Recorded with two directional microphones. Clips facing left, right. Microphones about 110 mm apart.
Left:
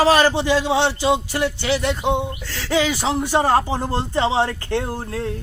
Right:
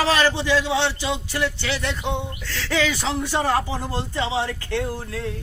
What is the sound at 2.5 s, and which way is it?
Speech, 35° left (ahead or behind).